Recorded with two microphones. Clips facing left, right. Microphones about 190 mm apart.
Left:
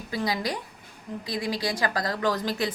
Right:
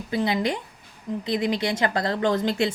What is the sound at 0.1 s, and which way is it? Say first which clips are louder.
A woman's voice: right 5 dB; 25° right (ahead or behind).